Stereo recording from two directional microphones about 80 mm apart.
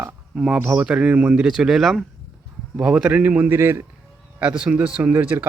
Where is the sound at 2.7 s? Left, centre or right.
Centre.